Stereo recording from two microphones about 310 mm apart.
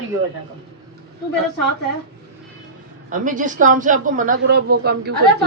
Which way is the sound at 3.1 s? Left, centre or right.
Right.